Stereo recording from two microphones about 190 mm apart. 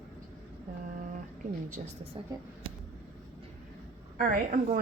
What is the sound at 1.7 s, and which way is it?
Speech, 35° right (ahead or behind).